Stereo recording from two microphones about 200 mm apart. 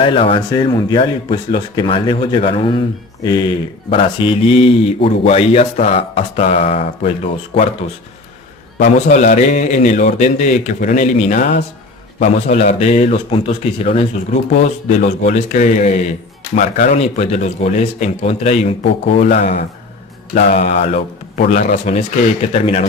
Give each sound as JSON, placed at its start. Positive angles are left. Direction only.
{"t": 0.0, "sound": "speech", "side_deg": 25}
{"t": 3.8, "sound": "mantra", "side_deg": 30}
{"t": 7.5, "sound": "speech", "side_deg": 30}
{"t": 8.8, "sound": "mantra", "side_deg": 40}